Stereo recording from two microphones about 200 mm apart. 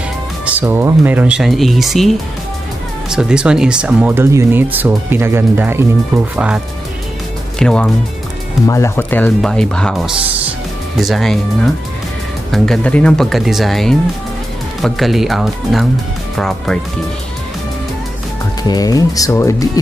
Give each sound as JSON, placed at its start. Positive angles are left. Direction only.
{"t": 0.5, "sound": "speech", "side_deg": -10}
{"t": 8.6, "sound": "speech", "side_deg": 15}
{"t": 18.6, "sound": "speech", "side_deg": 20}